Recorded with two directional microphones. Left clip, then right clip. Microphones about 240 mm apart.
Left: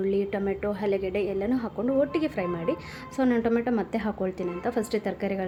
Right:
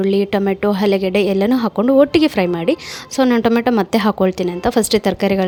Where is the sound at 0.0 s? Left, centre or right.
Right.